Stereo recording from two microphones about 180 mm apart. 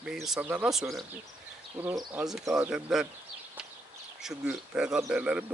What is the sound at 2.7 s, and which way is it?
Speech, 5° right (ahead or behind).